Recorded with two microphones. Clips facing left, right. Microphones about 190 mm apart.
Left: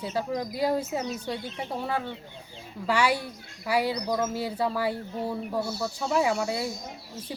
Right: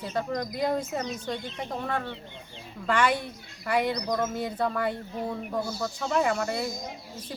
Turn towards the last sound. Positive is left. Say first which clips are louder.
# left 1 dB
turn(degrees=10)  # may be behind; listen again after turning